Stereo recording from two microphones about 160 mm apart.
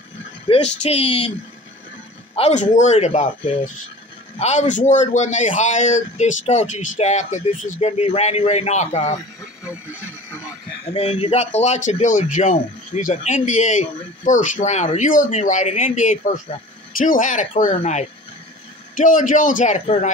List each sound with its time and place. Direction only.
0.5 s speech: 40° left (ahead or behind)
2.3 s a man's voice: 45° left (ahead or behind)
9.7 s radio: 10° right (ahead or behind)
10.9 s a man's voice: 40° left (ahead or behind)